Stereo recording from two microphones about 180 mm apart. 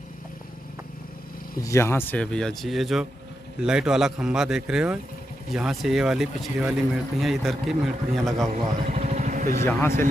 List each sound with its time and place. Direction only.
1.6 s speech: 15° left (ahead or behind); by 8.5 s centre (ahead or behind)
8.5 s a sound: 45° right (ahead or behind)
9.7 s a man's voice: 15° left (ahead or behind)